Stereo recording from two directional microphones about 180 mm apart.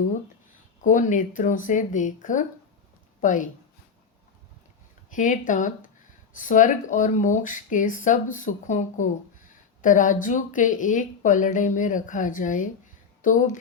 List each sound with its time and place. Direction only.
0.8 s a woman's voice: 45° left (ahead or behind)
5.1 s speech: 45° left (ahead or behind)